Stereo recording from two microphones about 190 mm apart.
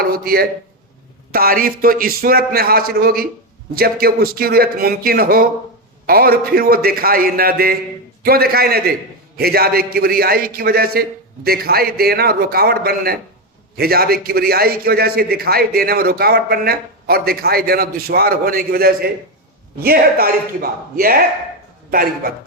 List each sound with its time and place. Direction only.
0.0 s a man's voice: 50° right (ahead or behind)